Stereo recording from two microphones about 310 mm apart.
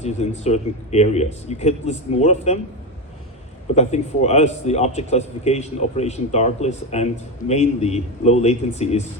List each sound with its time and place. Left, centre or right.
0.0 s a man's voice: left
3.8 s a man's voice: left